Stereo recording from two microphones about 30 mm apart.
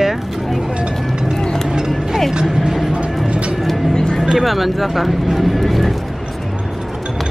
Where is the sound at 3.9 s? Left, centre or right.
Left.